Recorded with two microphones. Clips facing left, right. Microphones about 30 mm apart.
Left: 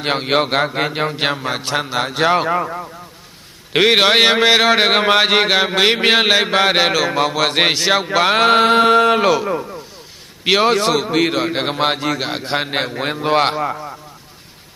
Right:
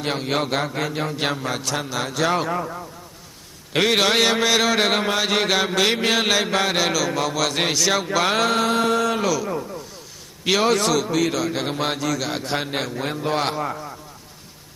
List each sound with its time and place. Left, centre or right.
0.0 s a man's voice: left
9.5 s a man's voice: left
13.6 s a man's voice: left